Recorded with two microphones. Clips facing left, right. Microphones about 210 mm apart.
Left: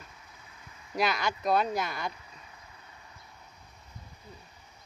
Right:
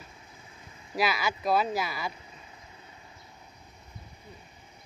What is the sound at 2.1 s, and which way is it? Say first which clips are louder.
Vehicle: right 2 dB; 25° right (ahead or behind).